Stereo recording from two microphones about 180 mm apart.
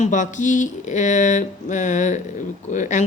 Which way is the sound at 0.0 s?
45° left (ahead or behind).